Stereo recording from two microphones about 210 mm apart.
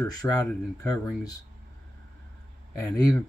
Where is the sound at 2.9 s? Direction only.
15° left (ahead or behind).